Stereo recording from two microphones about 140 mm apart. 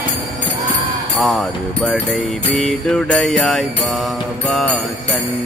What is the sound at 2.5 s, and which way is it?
Jingle bell, 5° left (ahead or behind).